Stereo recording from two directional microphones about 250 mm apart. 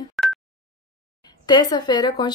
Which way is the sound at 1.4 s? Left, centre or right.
Centre.